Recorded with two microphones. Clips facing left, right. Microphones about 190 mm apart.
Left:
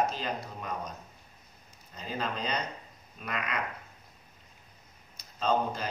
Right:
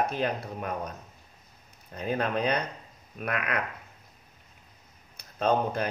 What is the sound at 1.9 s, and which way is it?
Speech, 60° right (ahead or behind).